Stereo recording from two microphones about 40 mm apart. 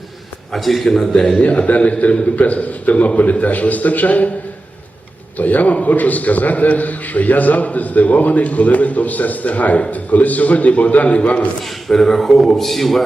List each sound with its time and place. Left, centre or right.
0.5 s a man's voice: centre
0.9 s a sound: centre
1.4 s a man's voice: left
5.4 s a man's voice: left
11.9 s a sound: centre
12.5 s a man's voice: centre